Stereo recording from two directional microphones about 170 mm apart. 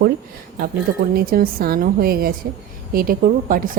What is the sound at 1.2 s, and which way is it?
Speech, 60° right (ahead or behind).